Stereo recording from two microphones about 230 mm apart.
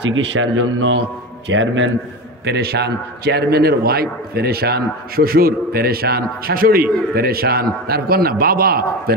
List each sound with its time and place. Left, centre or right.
0.1 s speech: right
2.4 s a man's voice: right